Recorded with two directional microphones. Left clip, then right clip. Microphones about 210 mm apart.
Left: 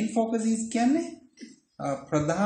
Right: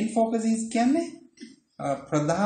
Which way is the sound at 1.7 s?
5° right (ahead or behind).